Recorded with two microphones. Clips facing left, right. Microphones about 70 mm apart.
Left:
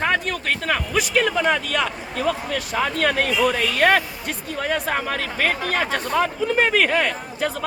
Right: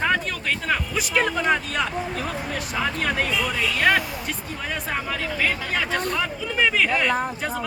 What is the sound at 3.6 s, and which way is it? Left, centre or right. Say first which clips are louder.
Speech: left 3 dB; left.